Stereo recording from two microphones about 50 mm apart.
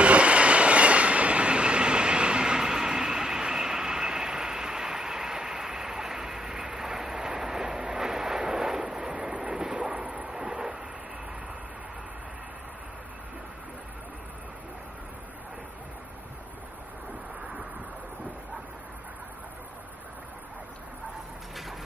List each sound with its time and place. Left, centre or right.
0.0 s train: right